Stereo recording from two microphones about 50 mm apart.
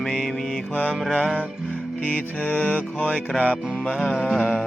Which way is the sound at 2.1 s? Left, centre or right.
Left.